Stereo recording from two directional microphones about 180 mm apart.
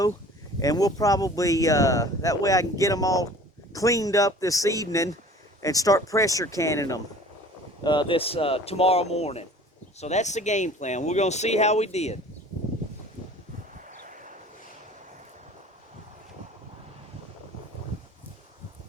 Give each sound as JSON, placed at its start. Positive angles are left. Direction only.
{"t": 0.6, "sound": "speech", "side_deg": 20}
{"t": 7.9, "sound": "speech", "side_deg": 25}
{"t": 13.8, "sound": "a sound", "side_deg": -45}